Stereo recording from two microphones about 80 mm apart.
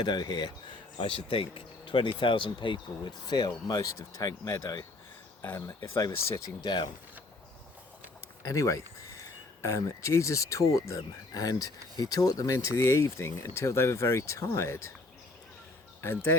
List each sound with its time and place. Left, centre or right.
0.0 s speech: left
1.8 s speech: left
3.0 s speech: left
5.4 s speech: left
6.0 s speech: left
8.4 s speech: left
16.0 s speech: left